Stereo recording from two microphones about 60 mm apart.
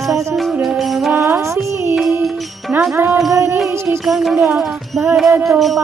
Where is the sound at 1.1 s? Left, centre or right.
Right.